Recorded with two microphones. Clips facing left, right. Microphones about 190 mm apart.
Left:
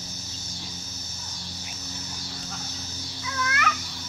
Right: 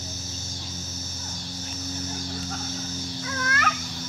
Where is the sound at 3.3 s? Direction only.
50° right (ahead or behind).